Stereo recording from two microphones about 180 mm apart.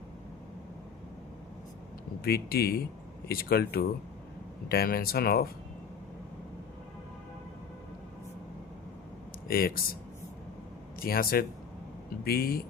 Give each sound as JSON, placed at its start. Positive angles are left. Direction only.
{"t": 2.2, "sound": "speech", "side_deg": 60}
{"t": 9.5, "sound": "speech", "side_deg": 55}
{"t": 11.0, "sound": "speech", "side_deg": 55}